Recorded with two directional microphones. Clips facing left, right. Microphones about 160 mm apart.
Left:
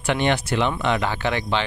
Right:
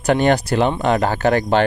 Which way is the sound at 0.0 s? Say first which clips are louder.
Right 6 dB; 40° right (ahead or behind).